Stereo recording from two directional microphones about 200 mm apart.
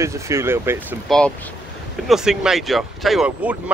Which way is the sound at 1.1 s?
5° left (ahead or behind).